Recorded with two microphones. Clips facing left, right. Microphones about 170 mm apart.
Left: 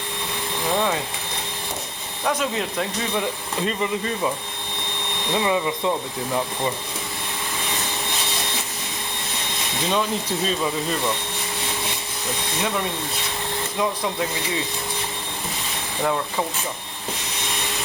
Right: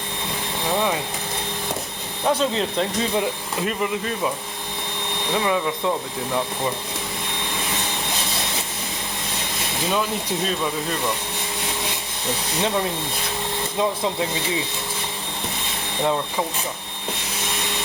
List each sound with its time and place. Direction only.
2.2 s speech: 30° right (ahead or behind)
3.7 s speech: 5° right (ahead or behind)
5.3 s speech: 10° left (ahead or behind)
9.9 s speech: 5° right (ahead or behind)